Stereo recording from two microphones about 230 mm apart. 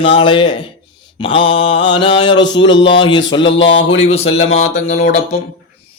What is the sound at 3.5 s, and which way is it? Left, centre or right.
Speech, left.